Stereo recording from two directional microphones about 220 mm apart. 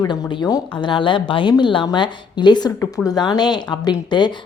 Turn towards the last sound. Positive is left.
turn(degrees=20)  # may be behind; listen again after turning